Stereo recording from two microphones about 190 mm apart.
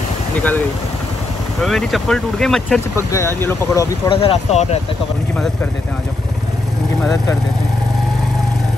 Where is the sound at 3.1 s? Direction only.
15° left (ahead or behind).